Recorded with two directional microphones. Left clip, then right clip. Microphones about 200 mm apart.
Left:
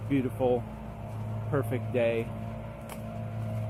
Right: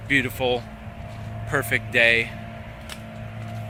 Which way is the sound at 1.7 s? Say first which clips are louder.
Right 11 dB; 5° right (ahead or behind).